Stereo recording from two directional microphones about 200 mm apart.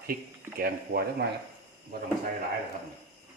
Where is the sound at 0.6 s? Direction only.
50° right (ahead or behind).